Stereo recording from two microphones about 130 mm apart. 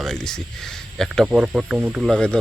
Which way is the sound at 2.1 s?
5° left (ahead or behind).